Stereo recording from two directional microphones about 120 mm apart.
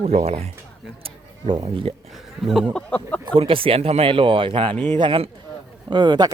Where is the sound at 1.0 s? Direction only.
50° right (ahead or behind).